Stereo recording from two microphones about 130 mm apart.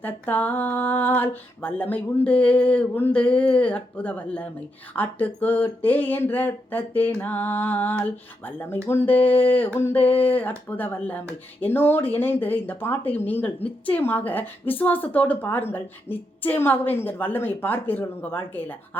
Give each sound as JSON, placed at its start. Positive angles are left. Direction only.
{"t": 0.0, "sound": "speech", "side_deg": 15}